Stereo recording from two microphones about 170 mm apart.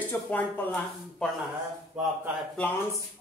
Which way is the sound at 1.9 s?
5° right (ahead or behind).